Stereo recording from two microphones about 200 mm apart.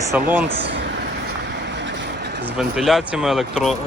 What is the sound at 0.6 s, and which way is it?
Vehicle, 60° right (ahead or behind).